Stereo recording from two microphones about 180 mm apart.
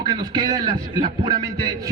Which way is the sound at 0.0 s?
25° right (ahead or behind).